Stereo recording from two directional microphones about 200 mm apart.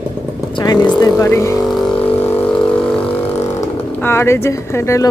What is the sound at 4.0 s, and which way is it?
Speech, 10° left (ahead or behind).